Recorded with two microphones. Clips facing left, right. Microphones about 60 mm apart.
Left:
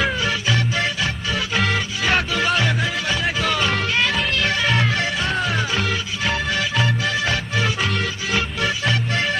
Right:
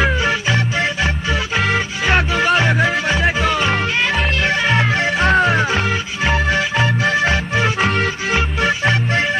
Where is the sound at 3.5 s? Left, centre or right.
Centre.